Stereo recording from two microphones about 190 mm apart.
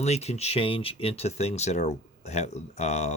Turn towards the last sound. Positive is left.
turn(degrees=35)  # may be behind; listen again after turning